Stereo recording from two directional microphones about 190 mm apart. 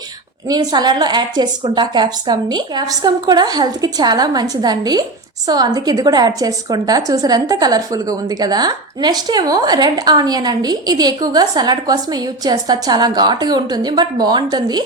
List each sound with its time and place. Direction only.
0.4 s a woman's voice: 20° right (ahead or behind)